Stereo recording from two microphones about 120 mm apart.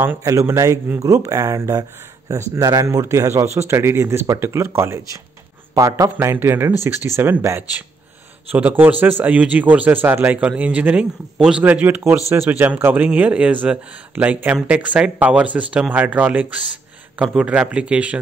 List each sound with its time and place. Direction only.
0.0 s a man's voice: 25° right (ahead or behind)